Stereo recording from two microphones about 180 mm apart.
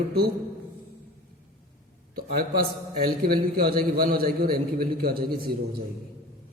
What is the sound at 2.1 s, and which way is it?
A man's voice, 55° right (ahead or behind).